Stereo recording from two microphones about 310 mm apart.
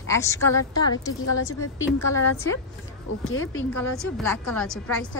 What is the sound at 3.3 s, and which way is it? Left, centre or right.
Speech, left.